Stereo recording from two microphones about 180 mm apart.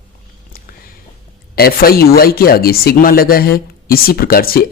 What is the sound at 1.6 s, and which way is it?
Speech, 55° left (ahead or behind).